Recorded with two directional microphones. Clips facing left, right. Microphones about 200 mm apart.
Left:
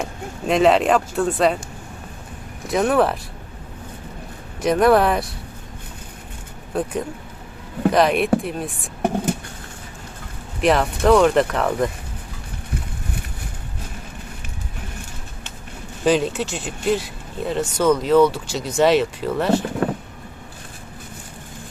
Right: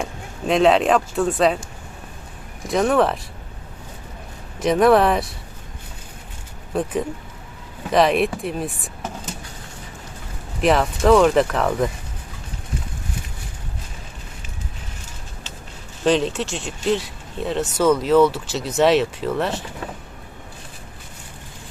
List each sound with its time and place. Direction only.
0.0 s speech: centre (ahead or behind)
2.6 s speech: centre (ahead or behind)
4.6 s speech: centre (ahead or behind)
6.7 s speech: centre (ahead or behind)
9.0 s a sound: 60° left (ahead or behind)
10.6 s speech: centre (ahead or behind)
16.0 s speech: 5° left (ahead or behind)